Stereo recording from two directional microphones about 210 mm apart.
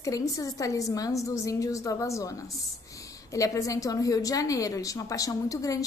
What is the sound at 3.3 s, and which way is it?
A woman's voice, 15° left (ahead or behind).